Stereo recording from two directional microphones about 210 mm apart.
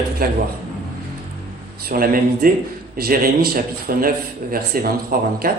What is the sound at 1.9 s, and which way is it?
A man's voice, 45° right (ahead or behind).